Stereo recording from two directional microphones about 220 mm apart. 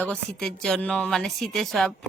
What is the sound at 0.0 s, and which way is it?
Speech, 5° left (ahead or behind).